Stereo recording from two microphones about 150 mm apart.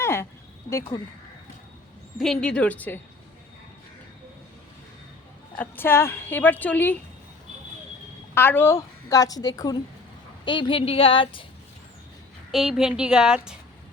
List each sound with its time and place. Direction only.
0.0 s a woman's voice: 15° left (ahead or behind)
2.1 s a woman's voice: 5° left (ahead or behind)
5.5 s a woman's voice: 15° left (ahead or behind)
8.4 s a woman's voice: 15° left (ahead or behind); by 11.4 s 35° left (ahead or behind)
12.5 s a woman's voice: centre (ahead or behind)